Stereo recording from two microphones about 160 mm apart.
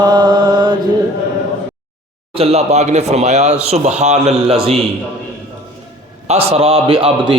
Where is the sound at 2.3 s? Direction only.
40° right (ahead or behind).